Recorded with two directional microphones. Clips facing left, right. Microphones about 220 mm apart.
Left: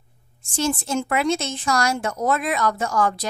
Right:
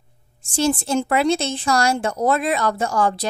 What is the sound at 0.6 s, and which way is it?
Speech, 30° right (ahead or behind).